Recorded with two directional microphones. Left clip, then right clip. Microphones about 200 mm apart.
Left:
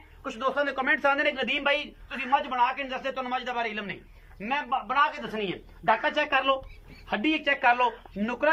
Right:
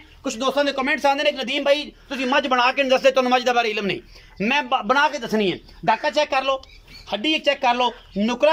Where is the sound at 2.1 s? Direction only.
45° right (ahead or behind).